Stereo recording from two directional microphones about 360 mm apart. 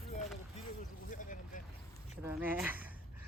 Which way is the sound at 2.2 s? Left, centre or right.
Centre.